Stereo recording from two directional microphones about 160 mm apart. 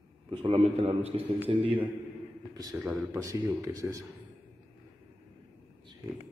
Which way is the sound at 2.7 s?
10° right (ahead or behind).